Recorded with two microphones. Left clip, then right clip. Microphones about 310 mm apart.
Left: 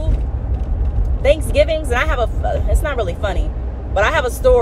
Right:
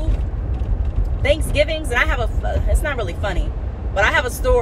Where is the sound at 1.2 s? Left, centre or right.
Centre.